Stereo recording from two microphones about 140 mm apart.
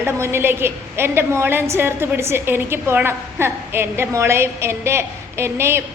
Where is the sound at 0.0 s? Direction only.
15° right (ahead or behind).